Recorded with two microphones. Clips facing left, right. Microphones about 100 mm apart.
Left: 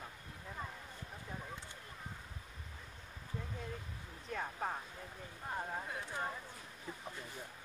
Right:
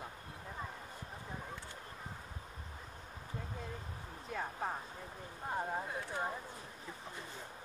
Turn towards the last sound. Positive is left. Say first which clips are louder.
# right 2 dB
turn(degrees=-15)  # may be behind; listen again after turning